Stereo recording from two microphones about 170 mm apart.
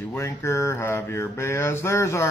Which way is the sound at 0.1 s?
15° left (ahead or behind).